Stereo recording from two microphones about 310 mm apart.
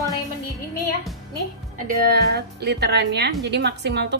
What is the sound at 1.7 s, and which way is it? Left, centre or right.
A woman's voice, right.